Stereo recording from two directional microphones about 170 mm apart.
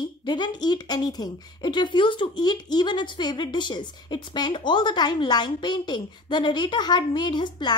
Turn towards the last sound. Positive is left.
turn(degrees=25)  # may be behind; listen again after turning